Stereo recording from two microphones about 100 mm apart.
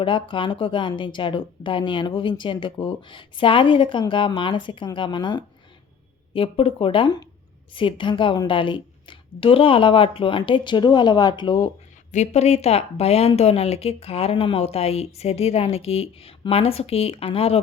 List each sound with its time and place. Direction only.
0.0 s speech: 60° left (ahead or behind)
6.3 s speech: 65° left (ahead or behind)
12.3 s speech: 90° left